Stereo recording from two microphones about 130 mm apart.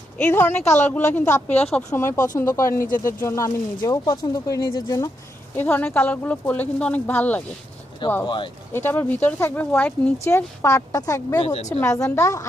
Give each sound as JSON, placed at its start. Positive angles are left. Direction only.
{"t": 0.2, "sound": "speech", "side_deg": 15}
{"t": 1.9, "sound": "speech", "side_deg": 20}
{"t": 5.5, "sound": "speech", "side_deg": 15}
{"t": 8.0, "sound": "speech", "side_deg": 35}
{"t": 8.7, "sound": "speech", "side_deg": 15}
{"t": 11.4, "sound": "speech", "side_deg": 50}
{"t": 11.8, "sound": "speech", "side_deg": 25}